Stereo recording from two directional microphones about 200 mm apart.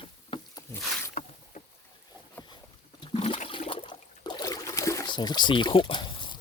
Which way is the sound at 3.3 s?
30° left (ahead or behind).